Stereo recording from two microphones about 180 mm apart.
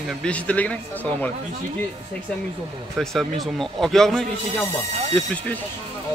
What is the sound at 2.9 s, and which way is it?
A man's voice, centre (ahead or behind).